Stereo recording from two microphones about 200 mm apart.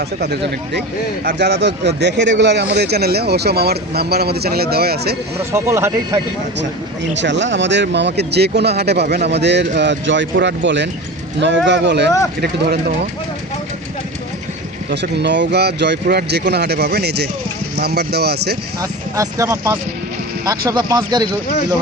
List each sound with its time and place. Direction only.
0.2 s speech: 55° right (ahead or behind)
5.5 s speech: 15° right (ahead or behind)
7.2 s speech: 65° right (ahead or behind)
14.8 s speech: 55° right (ahead or behind)
18.8 s speech: 15° right (ahead or behind)